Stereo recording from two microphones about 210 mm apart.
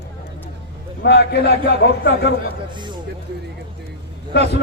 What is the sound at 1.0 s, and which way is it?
A man's voice, 50° left (ahead or behind).